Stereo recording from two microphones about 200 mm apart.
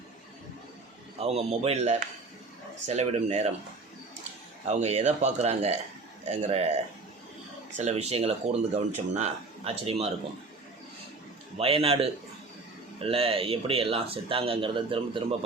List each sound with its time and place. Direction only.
1.2 s speech: 30° right (ahead or behind)
4.7 s speech: 35° right (ahead or behind)
7.8 s speech: 35° right (ahead or behind)
11.5 s speech: 30° right (ahead or behind)